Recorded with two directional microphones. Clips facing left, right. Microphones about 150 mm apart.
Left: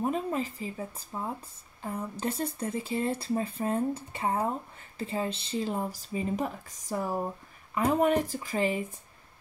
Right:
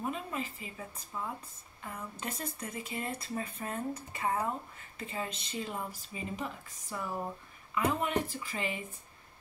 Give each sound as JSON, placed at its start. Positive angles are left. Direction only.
{"t": 0.0, "sound": "speech", "side_deg": 40}